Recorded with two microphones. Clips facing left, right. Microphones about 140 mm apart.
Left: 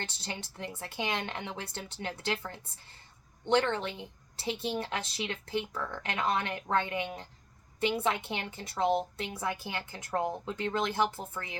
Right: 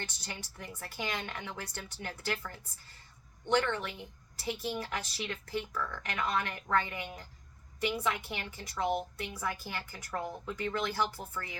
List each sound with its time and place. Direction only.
0.0 s a woman's voice: 25° left (ahead or behind)